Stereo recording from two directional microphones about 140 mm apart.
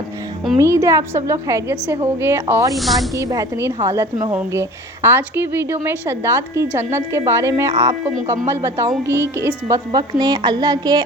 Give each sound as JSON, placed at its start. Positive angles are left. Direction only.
{"t": 0.6, "sound": "a woman's voice", "side_deg": -20}
{"t": 2.7, "sound": "speech", "side_deg": 0}
{"t": 3.2, "sound": "a woman's voice", "side_deg": -25}